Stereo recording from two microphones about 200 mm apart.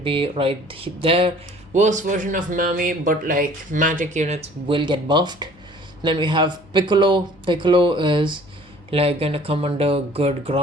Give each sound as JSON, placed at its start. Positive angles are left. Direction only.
{"t": 0.0, "sound": "speech", "side_deg": -25}